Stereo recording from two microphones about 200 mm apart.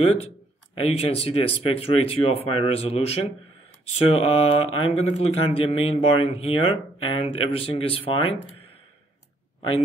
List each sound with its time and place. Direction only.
0.7 s speech: 30° left (ahead or behind)